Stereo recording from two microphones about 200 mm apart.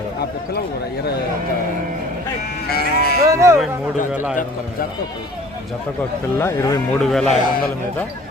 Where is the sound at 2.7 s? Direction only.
50° left (ahead or behind).